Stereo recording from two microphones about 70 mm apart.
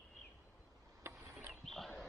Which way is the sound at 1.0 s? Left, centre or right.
Right.